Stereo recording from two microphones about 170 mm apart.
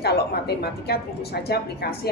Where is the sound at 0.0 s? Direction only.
70° left (ahead or behind).